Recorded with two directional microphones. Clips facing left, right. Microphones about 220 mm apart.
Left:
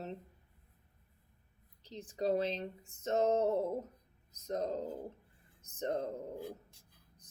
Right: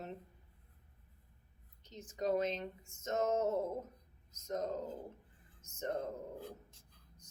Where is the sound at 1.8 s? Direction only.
35° left (ahead or behind).